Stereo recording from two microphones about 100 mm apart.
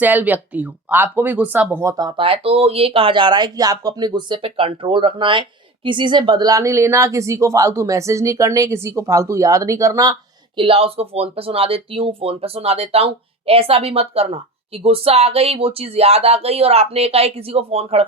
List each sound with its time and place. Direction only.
0.0 s speech: 20° right (ahead or behind)
1.7 s speech: 30° right (ahead or behind)
2.1 s speech: 70° right (ahead or behind); by 4.4 s 45° right (ahead or behind)
4.4 s speech: 70° right (ahead or behind); by 10.2 s 35° right (ahead or behind)
10.6 s speech: 70° right (ahead or behind); by 13.1 s 85° right
13.5 s speech: 70° right (ahead or behind); by 18.0 s 85° right